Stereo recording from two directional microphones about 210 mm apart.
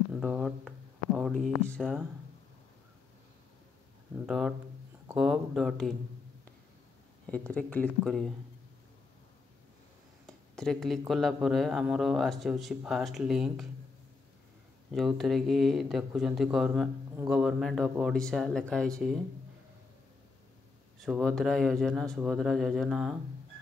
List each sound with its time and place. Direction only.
0.1 s speech: centre (ahead or behind)
4.3 s speech: centre (ahead or behind)
7.2 s speech: 5° left (ahead or behind)
10.2 s speech: 5° left (ahead or behind)
15.0 s speech: centre (ahead or behind)
21.0 s speech: centre (ahead or behind)